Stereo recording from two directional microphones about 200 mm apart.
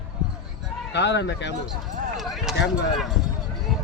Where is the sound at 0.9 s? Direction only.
60° left (ahead or behind).